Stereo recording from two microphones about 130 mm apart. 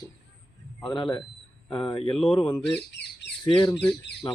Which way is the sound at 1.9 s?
40° left (ahead or behind).